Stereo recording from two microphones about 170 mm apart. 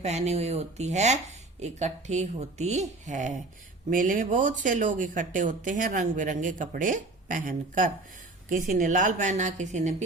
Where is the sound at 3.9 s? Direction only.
50° right (ahead or behind).